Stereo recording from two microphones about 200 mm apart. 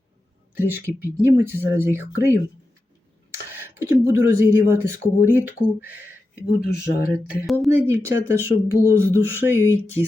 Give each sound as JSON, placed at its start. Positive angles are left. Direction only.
{"t": 0.5, "sound": "speech", "side_deg": -10}
{"t": 3.6, "sound": "speech", "side_deg": -15}
{"t": 6.5, "sound": "speech", "side_deg": 50}
{"t": 7.4, "sound": "speech", "side_deg": 0}
{"t": 7.9, "sound": "speech", "side_deg": -10}